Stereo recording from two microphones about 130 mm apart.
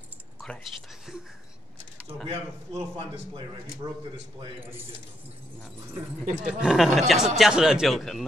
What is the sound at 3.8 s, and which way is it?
Speech, 30° right (ahead or behind).